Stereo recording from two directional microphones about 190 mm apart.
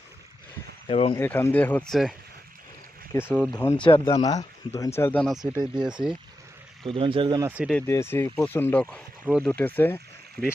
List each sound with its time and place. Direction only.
0.9 s speech: 30° left (ahead or behind)
1.1 s speech: 10° left (ahead or behind)
3.1 s speech: 10° left (ahead or behind)
3.8 s speech: 30° left (ahead or behind); by 5.9 s 10° right (ahead or behind)
6.8 s speech: 30° right (ahead or behind)
7.4 s speech: 5° right (ahead or behind)
7.7 s speech: 10° left (ahead or behind)
9.2 s speech: 5° right (ahead or behind)
9.5 s speech: 10° left (ahead or behind)